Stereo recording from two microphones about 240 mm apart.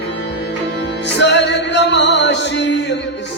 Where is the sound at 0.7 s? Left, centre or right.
Left.